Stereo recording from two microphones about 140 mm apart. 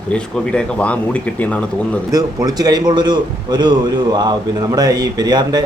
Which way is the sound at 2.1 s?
25° right (ahead or behind).